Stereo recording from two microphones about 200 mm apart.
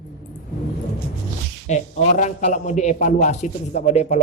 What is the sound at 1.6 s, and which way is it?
Speech, 40° left (ahead or behind).